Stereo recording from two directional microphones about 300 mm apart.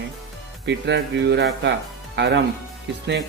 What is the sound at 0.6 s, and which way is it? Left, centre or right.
A man's voice, right.